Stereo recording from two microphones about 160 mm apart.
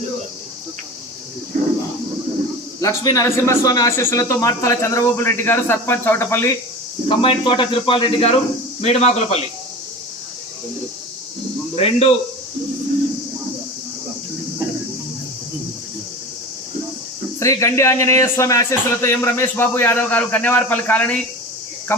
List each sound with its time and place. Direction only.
2.8 s speech: 20° left (ahead or behind)
7.1 s speech: 30° left (ahead or behind)
11.8 s speech: 40° left (ahead or behind)
17.4 s speech: 20° left (ahead or behind)